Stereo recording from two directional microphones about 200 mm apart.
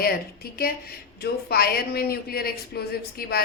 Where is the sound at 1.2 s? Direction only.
50° left (ahead or behind).